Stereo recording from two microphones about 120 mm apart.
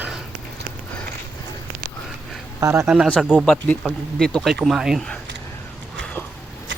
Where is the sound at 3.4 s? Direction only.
5° left (ahead or behind).